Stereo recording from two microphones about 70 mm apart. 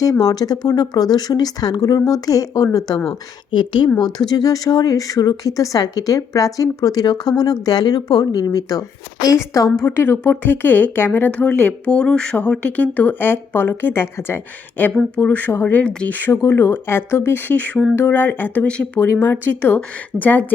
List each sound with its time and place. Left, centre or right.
0.0 s speech: left
4.0 s speech: left
9.8 s speech: left
11.9 s speech: centre
19.1 s speech: left